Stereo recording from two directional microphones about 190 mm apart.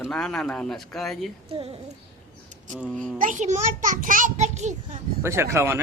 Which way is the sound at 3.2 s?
40° right (ahead or behind).